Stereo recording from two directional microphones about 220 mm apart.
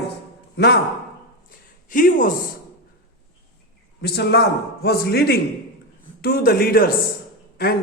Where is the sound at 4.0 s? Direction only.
45° left (ahead or behind).